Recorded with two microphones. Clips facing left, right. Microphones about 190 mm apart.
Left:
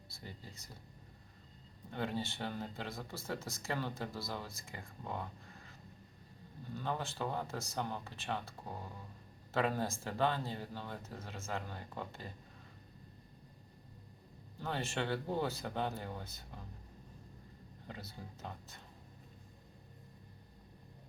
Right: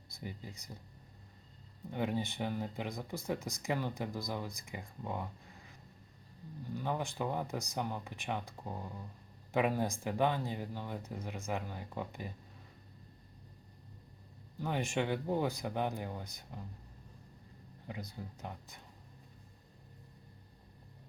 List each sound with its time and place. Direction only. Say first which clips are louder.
0.1 s speech: right 6 dB; 15° right (ahead or behind)
1.9 s speech: right 3 dB; 15° right (ahead or behind)
6.7 s speech: right 2 dB; 15° right (ahead or behind)
14.6 s speech: right 4 dB; 15° right (ahead or behind)
17.8 s speech: right 4 dB; 15° right (ahead or behind)